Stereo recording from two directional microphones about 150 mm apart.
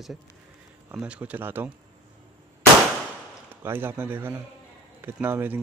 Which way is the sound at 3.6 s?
15° right (ahead or behind).